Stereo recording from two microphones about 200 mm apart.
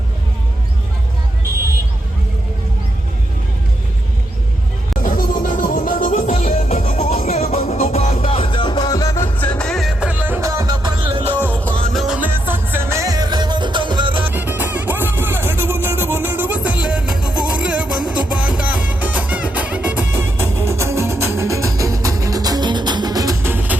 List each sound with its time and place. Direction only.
5.0 s music: 45° left (ahead or behind); by 11.3 s 25° right (ahead or behind)
11.6 s music: centre (ahead or behind); by 14.3 s 25° right (ahead or behind)
14.3 s music: 10° right (ahead or behind)